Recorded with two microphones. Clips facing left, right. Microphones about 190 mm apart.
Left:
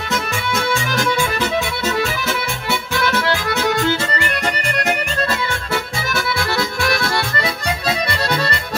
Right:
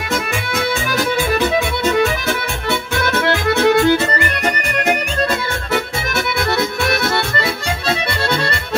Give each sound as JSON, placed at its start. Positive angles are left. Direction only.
{"t": 3.3, "sound": "accordion", "side_deg": -55}
{"t": 5.7, "sound": "music", "side_deg": -25}